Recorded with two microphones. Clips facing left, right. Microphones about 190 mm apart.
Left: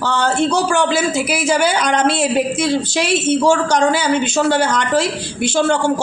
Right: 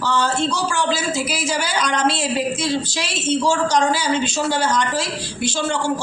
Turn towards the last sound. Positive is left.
turn(degrees=60)  # may be behind; listen again after turning